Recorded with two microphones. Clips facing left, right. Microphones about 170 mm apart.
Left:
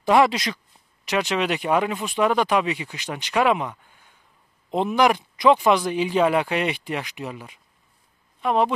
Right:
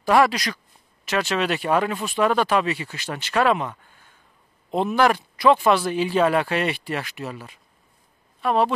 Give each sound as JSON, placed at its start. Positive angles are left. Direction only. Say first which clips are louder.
{"t": 0.0, "sound": "speech", "louder": "even", "side_deg": 20}